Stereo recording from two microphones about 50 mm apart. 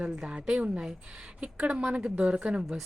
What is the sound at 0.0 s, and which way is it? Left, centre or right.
A woman's voice, right.